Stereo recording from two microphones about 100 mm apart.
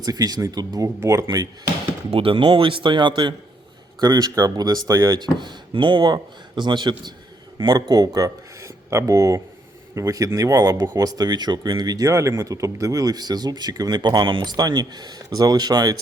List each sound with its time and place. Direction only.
0.0 s speech: 40° right (ahead or behind)
0.9 s speech: 30° right (ahead or behind)
2.0 s a man's voice: 65° right (ahead or behind)
4.0 s speech: 40° right (ahead or behind)
5.2 s speech: 50° right (ahead or behind)